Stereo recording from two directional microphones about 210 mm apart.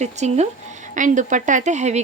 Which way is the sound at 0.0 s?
35° right (ahead or behind).